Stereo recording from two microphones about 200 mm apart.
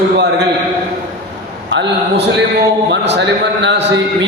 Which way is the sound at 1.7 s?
60° right (ahead or behind).